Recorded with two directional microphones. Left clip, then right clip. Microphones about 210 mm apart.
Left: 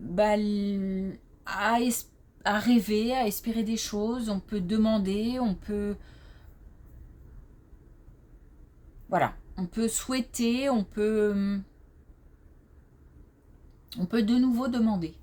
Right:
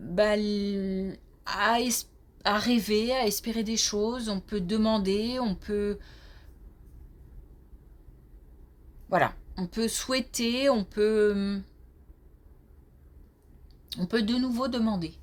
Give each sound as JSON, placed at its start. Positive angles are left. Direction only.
{"t": 0.1, "sound": "a woman's voice", "side_deg": -30}
{"t": 9.0, "sound": "a woman's voice", "side_deg": -30}
{"t": 13.9, "sound": "a woman's voice", "side_deg": -25}